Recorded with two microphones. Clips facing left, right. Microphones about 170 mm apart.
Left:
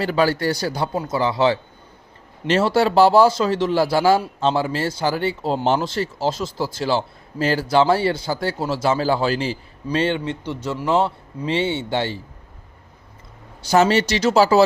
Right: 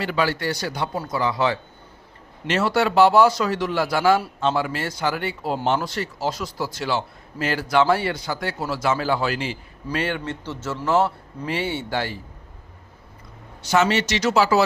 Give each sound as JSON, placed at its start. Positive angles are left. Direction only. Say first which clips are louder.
{"t": 0.0, "sound": "a man's voice", "louder": "left 4 dB", "side_deg": 40}
{"t": 13.6, "sound": "a man's voice", "louder": "left 4 dB", "side_deg": 35}